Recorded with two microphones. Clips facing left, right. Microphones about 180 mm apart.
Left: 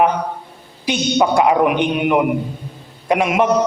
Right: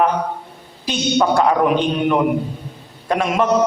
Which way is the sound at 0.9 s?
15° left (ahead or behind).